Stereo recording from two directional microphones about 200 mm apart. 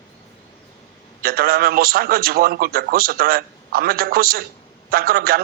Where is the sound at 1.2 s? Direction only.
50° right (ahead or behind).